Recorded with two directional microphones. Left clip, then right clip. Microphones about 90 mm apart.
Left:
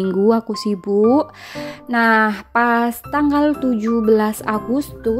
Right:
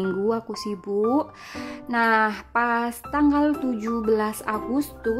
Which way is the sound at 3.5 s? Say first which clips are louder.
Left 7 dB; 40° left (ahead or behind).